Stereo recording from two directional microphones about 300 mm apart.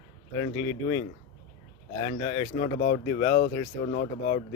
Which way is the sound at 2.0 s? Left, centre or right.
Centre.